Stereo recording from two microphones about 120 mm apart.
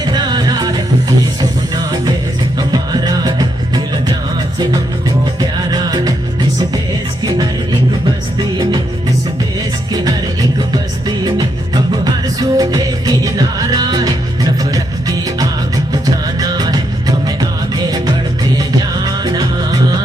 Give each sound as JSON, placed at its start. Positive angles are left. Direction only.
{"t": 0.0, "sound": "music", "side_deg": -35}
{"t": 5.4, "sound": "music", "side_deg": -35}
{"t": 9.9, "sound": "music", "side_deg": -30}